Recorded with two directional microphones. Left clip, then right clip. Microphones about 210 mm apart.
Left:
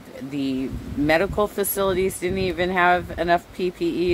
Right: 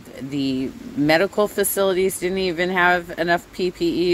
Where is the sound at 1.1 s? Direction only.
30° right (ahead or behind).